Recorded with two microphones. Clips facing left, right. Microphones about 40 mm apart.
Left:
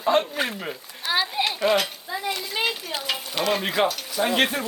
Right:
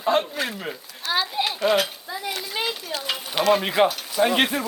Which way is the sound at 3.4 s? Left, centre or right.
Centre.